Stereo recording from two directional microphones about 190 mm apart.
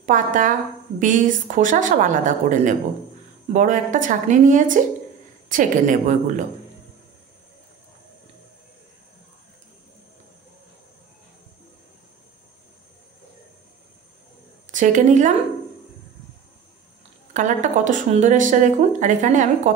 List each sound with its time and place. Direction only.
0.0 s a woman's voice: 45° right (ahead or behind)
14.7 s a woman's voice: 40° right (ahead or behind)
17.3 s speech: 40° right (ahead or behind)